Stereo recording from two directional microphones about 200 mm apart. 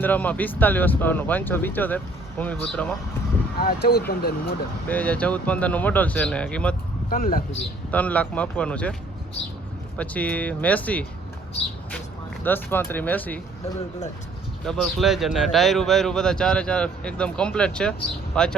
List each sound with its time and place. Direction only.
0.0 s speech: 10° left (ahead or behind)
3.6 s speech: 50° left (ahead or behind)
4.9 s speech: 5° left (ahead or behind)
7.1 s speech: 45° left (ahead or behind)
7.9 s speech: 5° left (ahead or behind)
10.0 s speech: 5° left (ahead or behind)
12.4 s speech: 10° left (ahead or behind)
14.6 s speech: 5° left (ahead or behind)